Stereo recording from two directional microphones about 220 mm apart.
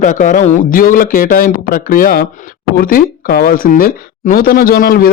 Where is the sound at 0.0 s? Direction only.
35° left (ahead or behind).